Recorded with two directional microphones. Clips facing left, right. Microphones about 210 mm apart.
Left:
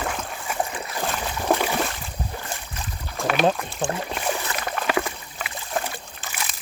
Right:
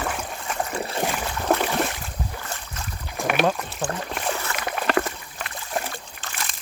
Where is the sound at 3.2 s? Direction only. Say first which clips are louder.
Even; 15° right (ahead or behind).